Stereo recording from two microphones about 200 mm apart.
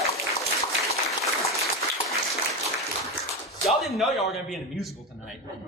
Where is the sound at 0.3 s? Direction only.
15° left (ahead or behind).